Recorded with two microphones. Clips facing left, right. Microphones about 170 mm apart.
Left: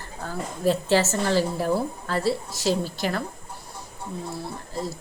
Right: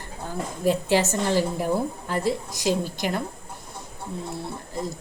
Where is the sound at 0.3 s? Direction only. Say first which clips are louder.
Even; 15° right (ahead or behind).